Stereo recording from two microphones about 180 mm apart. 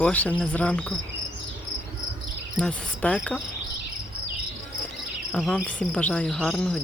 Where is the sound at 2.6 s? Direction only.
5° left (ahead or behind).